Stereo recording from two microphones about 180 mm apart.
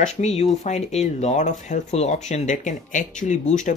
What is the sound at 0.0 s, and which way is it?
Speech, 40° left (ahead or behind).